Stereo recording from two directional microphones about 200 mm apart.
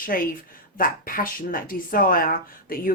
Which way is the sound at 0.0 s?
45° left (ahead or behind).